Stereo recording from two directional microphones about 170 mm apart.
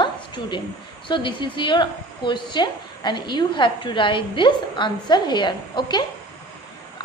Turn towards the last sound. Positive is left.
turn(degrees=25)  # may be behind; listen again after turning